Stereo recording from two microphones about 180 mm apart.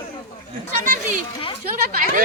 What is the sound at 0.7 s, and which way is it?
Speech, 45° right (ahead or behind).